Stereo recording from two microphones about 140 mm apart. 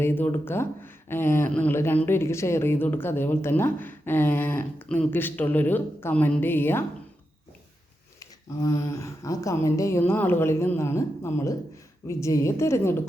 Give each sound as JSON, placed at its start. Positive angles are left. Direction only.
{"t": 0.0, "sound": "speech", "side_deg": 15}
{"t": 8.2, "sound": "speech", "side_deg": 25}